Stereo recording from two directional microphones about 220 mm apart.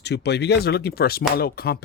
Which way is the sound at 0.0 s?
50° left (ahead or behind).